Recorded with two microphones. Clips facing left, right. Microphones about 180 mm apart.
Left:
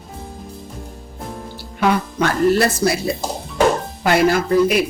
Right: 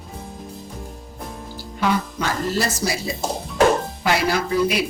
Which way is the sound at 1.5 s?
60° left (ahead or behind).